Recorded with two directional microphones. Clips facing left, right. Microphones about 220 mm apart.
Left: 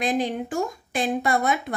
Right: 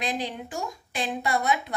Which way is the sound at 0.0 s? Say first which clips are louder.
Left 7 dB; 50° left (ahead or behind).